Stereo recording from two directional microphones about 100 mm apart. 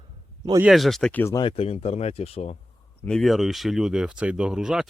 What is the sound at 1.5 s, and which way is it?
Speech, 90° left.